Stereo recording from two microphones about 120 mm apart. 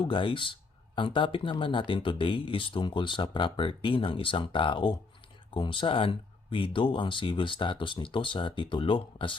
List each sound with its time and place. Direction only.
0.0 s speech: 45° left (ahead or behind)